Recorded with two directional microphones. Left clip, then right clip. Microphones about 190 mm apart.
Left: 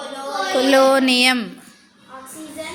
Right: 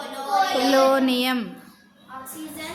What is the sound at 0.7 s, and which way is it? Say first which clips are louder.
Speech: left 5 dB; 15° left (ahead or behind).